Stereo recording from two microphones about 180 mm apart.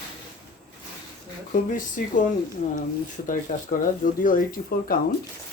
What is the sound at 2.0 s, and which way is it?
Speech, 45° left (ahead or behind).